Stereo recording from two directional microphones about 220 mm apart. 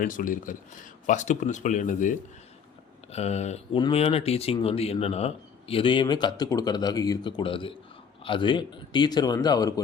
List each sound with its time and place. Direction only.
0.0 s speech: 40° left (ahead or behind); by 9.8 s 15° left (ahead or behind)